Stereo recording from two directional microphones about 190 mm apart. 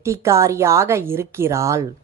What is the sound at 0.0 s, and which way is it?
A woman's voice, 15° right (ahead or behind).